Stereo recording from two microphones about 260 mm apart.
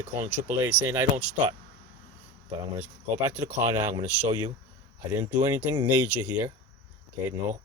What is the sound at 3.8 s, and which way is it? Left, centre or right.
Speech, centre.